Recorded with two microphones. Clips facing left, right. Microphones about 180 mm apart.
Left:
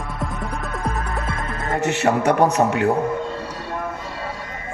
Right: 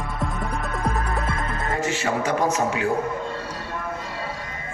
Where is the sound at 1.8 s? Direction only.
65° left (ahead or behind).